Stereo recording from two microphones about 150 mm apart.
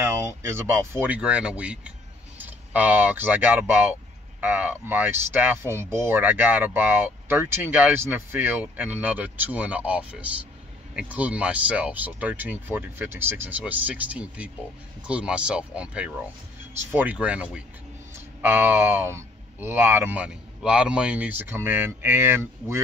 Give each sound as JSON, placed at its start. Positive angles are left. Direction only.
{"t": 0.0, "sound": "speech", "side_deg": -15}